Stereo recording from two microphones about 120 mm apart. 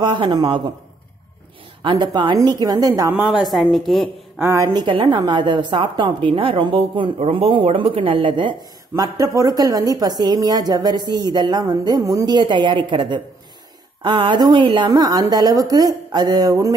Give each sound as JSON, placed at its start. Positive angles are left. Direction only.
{"t": 0.0, "sound": "a woman's voice", "side_deg": -40}
{"t": 1.8, "sound": "a woman's voice", "side_deg": -40}
{"t": 3.3, "sound": "a woman's voice", "side_deg": 0}
{"t": 4.4, "sound": "a woman's voice", "side_deg": -20}
{"t": 4.7, "sound": "a woman's voice", "side_deg": -40}